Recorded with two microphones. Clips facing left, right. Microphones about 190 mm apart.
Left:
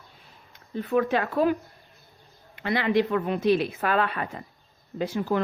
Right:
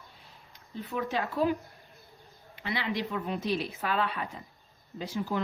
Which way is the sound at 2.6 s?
50° left (ahead or behind).